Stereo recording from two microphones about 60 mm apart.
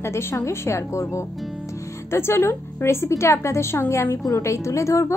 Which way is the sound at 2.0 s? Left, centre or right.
Left.